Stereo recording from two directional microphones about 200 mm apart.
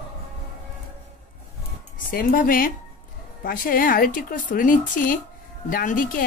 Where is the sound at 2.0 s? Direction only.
45° left (ahead or behind).